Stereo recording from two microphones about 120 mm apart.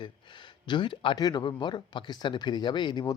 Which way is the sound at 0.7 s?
40° left (ahead or behind).